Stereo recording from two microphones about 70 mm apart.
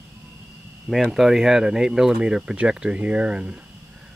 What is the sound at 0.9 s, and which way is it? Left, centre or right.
Speech, centre.